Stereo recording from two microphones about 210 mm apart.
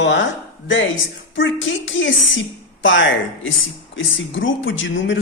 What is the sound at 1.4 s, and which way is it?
Speech, 65° left (ahead or behind).